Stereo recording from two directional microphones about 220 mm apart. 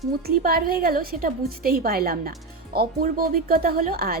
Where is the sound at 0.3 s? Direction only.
40° right (ahead or behind).